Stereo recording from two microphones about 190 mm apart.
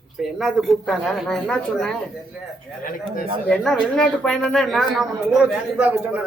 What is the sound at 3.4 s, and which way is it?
Speech, 5° left (ahead or behind).